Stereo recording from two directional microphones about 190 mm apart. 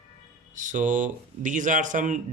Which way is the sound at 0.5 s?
40° right (ahead or behind).